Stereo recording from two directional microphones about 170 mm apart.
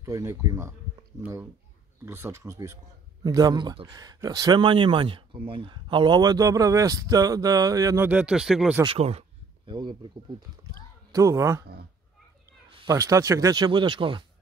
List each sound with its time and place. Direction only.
0.0 s speech: 15° right (ahead or behind)
8.8 s speech: 35° right (ahead or behind); by 11.6 s 15° right (ahead or behind)
12.8 s speech: 20° right (ahead or behind)